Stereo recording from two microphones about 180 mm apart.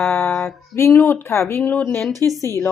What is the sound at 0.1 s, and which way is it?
Female singing, 10° left (ahead or behind).